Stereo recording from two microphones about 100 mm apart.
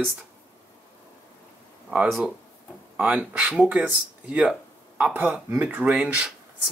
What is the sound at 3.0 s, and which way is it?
Speech, 15° right (ahead or behind).